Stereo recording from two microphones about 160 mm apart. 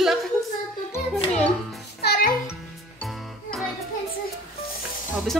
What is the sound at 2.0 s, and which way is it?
Music, 80° left.